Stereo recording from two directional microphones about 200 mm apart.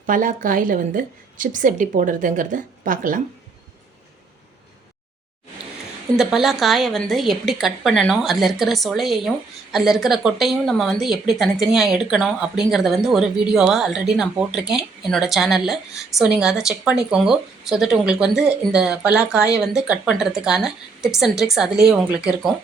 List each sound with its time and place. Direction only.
0.0 s a woman's voice: 40° right (ahead or behind)
6.1 s speech: centre (ahead or behind)